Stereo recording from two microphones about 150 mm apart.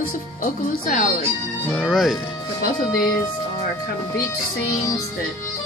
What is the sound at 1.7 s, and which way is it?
Speech, centre (ahead or behind).